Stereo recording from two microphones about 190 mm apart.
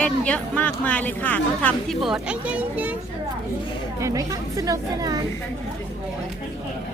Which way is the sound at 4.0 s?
15° right (ahead or behind).